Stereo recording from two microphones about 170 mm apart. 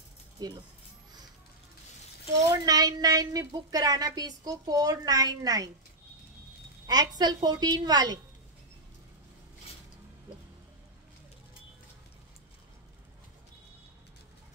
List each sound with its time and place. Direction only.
0.4 s a woman's voice: 20° right (ahead or behind)
2.5 s a woman's voice: 20° right (ahead or behind)
6.9 s a woman's voice: 25° right (ahead or behind)